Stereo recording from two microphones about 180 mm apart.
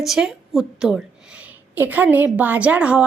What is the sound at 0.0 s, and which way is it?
A woman's voice, centre (ahead or behind).